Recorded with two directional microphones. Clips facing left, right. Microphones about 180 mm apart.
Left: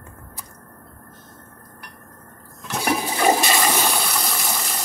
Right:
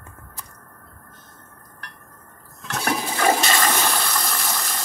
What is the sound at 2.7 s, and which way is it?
Toilet flush, 10° left (ahead or behind).